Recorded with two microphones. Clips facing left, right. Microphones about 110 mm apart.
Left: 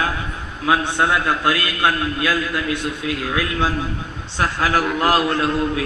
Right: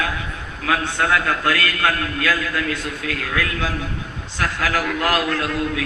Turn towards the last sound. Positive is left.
turn(degrees=30)  # may be behind; listen again after turning